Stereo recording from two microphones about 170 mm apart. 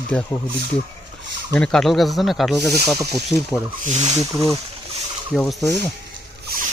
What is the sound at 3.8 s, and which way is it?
Speech, 40° right (ahead or behind).